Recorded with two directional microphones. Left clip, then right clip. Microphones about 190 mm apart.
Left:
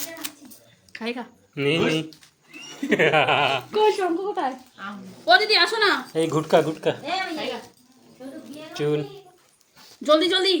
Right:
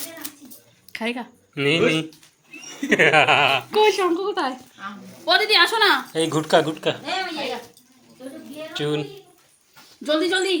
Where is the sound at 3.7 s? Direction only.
60° right (ahead or behind).